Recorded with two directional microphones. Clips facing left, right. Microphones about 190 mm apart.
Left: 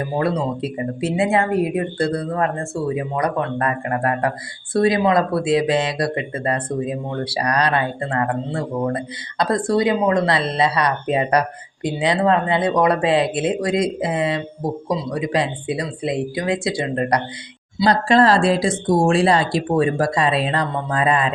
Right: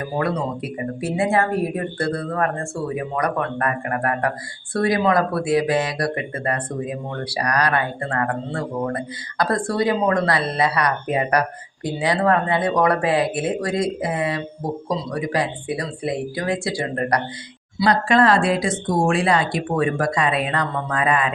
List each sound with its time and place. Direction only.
0.0 s speech: 25° left (ahead or behind)